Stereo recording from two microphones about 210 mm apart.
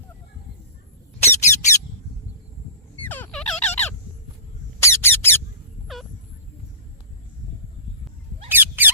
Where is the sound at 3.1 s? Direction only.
5° left (ahead or behind).